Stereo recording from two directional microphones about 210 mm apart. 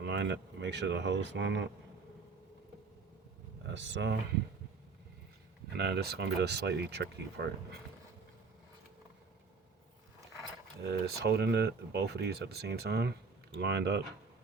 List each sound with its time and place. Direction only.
0.0 s speech: 55° right (ahead or behind)
3.7 s speech: 60° right (ahead or behind)
5.7 s speech: 50° right (ahead or behind)
10.8 s speech: 50° right (ahead or behind)